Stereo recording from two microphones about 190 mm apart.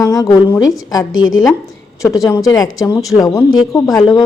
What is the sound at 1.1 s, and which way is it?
Speech, 90° left.